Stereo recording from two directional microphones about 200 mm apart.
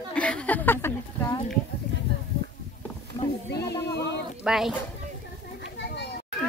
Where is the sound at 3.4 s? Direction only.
55° left (ahead or behind).